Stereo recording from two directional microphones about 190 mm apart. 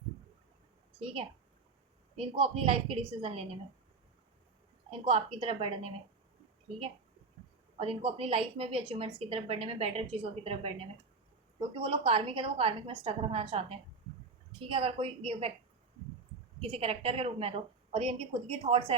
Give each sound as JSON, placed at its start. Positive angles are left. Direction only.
{"t": 0.9, "sound": "a woman's voice", "side_deg": -30}
{"t": 4.9, "sound": "a woman's voice", "side_deg": -30}
{"t": 7.8, "sound": "a woman's voice", "side_deg": -30}
{"t": 16.6, "sound": "a woman's voice", "side_deg": -30}